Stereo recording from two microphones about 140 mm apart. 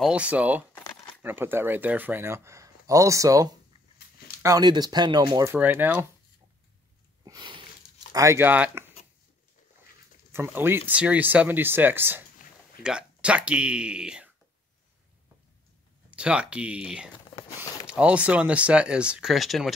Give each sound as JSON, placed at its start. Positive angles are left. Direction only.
{"t": 0.0, "sound": "speech", "side_deg": -10}
{"t": 4.6, "sound": "speech", "side_deg": -30}
{"t": 5.5, "sound": "speech", "side_deg": -15}
{"t": 7.2, "sound": "a sound", "side_deg": -35}
{"t": 8.1, "sound": "speech", "side_deg": -20}
{"t": 10.3, "sound": "speech", "side_deg": -15}
{"t": 16.1, "sound": "speech", "side_deg": -10}